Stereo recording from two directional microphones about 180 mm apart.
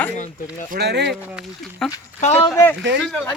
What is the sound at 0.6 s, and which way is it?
Speech, 60° right (ahead or behind).